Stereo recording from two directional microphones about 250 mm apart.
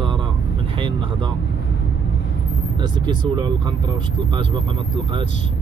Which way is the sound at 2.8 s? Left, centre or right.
Centre.